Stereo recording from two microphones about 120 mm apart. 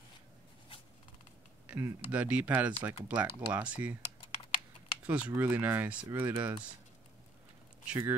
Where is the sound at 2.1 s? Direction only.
10° right (ahead or behind).